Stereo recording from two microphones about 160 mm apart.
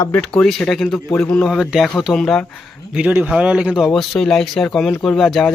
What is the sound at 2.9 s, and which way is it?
Speech, 10° right (ahead or behind).